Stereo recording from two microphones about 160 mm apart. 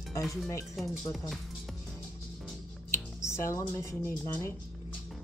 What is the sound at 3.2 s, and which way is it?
A woman's voice, 15° left (ahead or behind).